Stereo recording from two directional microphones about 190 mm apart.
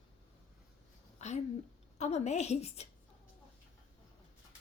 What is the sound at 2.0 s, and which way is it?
Speech, 35° left (ahead or behind).